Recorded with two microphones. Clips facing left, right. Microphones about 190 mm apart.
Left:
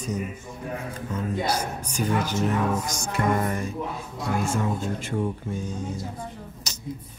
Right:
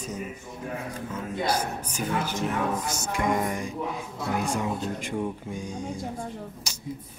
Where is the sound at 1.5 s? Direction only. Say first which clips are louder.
Even; 10° right (ahead or behind).